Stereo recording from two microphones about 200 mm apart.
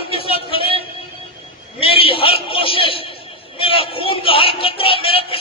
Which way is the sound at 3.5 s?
25° left (ahead or behind).